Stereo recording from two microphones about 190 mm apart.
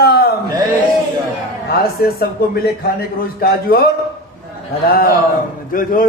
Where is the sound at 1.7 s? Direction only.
55° left (ahead or behind).